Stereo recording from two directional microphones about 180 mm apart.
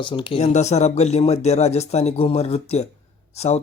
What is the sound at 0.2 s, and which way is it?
Speech, 30° left (ahead or behind).